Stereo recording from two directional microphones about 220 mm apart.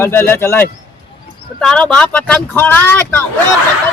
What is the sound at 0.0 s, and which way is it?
Speech, 10° left (ahead or behind).